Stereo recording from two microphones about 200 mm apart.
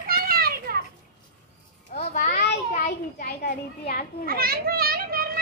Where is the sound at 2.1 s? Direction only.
35° left (ahead or behind).